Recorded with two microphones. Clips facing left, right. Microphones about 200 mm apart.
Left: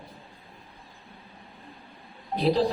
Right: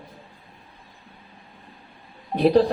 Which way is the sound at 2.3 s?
60° right (ahead or behind).